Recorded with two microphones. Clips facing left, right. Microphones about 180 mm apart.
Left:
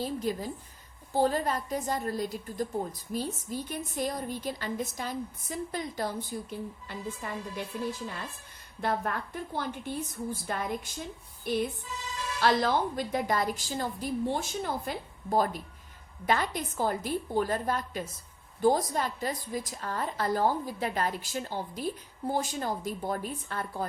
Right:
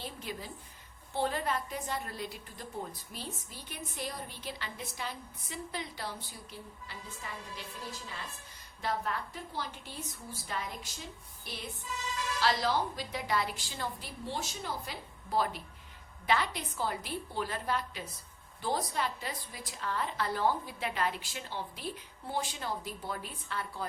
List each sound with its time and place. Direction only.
0.0 s a woman's voice: 40° left (ahead or behind)
8.8 s a woman's voice: 55° left (ahead or behind)